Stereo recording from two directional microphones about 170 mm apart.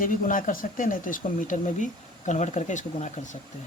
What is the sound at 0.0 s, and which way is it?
Speech, 50° left (ahead or behind).